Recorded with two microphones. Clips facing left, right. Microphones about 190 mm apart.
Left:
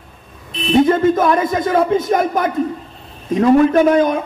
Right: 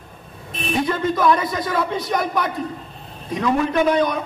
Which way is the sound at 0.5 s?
45° right (ahead or behind).